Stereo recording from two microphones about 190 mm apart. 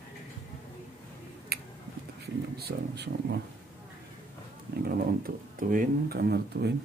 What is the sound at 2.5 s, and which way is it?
Speech, 60° right (ahead or behind).